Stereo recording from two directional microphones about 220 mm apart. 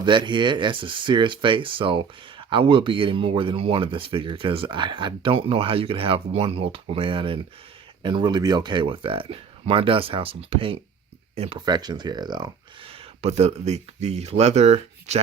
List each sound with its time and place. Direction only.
0.0 s speech: 20° right (ahead or behind)